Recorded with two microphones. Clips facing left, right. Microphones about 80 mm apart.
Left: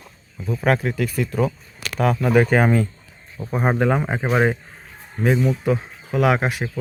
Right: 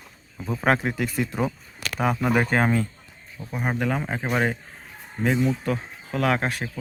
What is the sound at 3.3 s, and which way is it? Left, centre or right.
Speech, left.